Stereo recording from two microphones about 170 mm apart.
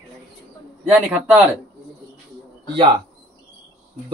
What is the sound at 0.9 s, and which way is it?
Speech, 10° right (ahead or behind).